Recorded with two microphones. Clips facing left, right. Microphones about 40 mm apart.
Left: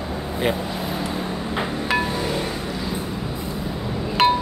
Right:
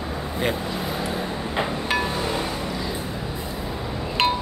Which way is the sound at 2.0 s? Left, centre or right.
Centre.